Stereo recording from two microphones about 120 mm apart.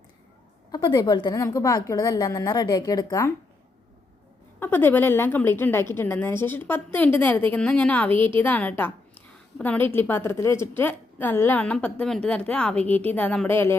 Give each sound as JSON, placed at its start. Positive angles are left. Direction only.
{"t": 0.7, "sound": "a woman's voice", "side_deg": 35}
{"t": 4.6, "sound": "a woman's voice", "side_deg": 15}